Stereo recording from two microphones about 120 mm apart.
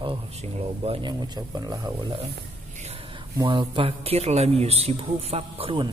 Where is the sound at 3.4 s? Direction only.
40° right (ahead or behind).